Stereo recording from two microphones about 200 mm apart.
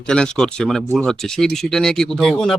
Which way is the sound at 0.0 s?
5° left (ahead or behind).